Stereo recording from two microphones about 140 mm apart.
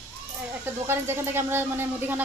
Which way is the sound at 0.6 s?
15° right (ahead or behind).